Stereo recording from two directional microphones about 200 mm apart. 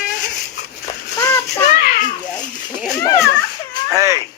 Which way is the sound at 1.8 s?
45° left (ahead or behind).